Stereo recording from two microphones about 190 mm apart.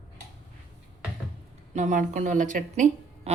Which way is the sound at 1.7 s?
40° right (ahead or behind).